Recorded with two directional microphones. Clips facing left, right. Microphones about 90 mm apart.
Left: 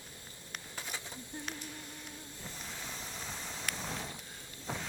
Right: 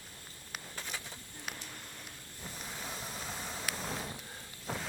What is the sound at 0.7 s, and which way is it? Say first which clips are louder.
Pigeon: left 1 dB; 15° left (ahead or behind).